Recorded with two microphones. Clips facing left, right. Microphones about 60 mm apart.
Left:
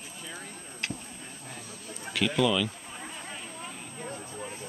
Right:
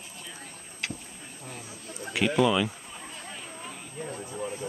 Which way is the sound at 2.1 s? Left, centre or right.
Centre.